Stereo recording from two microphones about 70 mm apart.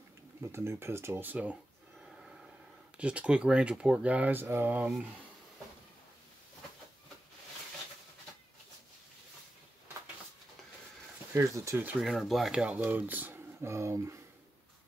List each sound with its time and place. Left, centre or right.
0.4 s speech: right
2.0 s snort: centre
3.0 s speech: centre
11.3 s speech: right
12.0 s speech: centre
12.8 s speech: right
13.6 s speech: right